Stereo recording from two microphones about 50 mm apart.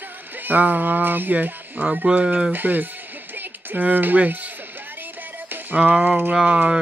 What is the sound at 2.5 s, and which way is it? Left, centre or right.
Mantra, right.